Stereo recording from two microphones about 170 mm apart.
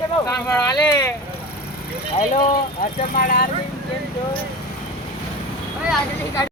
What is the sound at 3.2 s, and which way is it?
Speech, 60° left (ahead or behind).